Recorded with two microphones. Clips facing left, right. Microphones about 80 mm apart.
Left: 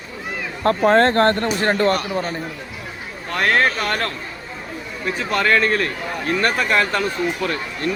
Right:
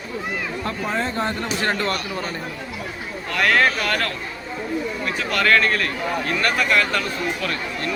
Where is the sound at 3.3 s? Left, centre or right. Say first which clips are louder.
Even; left.